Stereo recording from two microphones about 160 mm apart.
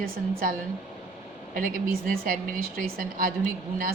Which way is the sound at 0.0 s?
65° right (ahead or behind).